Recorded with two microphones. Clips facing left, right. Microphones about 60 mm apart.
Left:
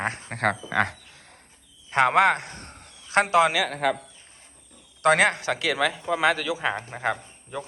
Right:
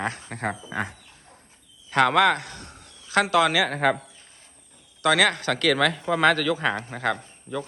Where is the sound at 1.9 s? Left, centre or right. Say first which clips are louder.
Even; left.